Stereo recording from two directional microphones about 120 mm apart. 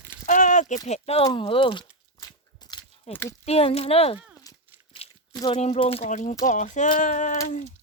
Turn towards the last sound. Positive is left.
turn(degrees=90)